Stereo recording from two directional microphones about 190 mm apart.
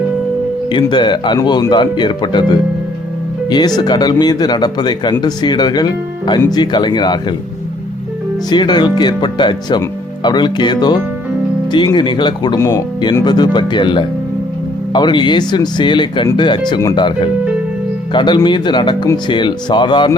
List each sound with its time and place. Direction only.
0.7 s speech: 25° left (ahead or behind)
3.8 s speech: 20° left (ahead or behind)
8.4 s speech: 20° left (ahead or behind)